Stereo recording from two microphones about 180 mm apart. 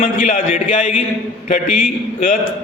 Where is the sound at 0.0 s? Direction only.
50° left (ahead or behind).